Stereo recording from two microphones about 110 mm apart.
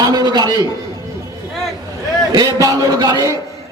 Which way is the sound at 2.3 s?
35° right (ahead or behind).